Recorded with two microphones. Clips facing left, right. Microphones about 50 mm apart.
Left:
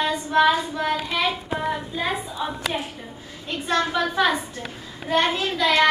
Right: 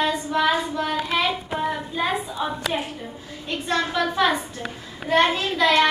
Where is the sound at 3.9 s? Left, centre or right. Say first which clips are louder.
Even; centre.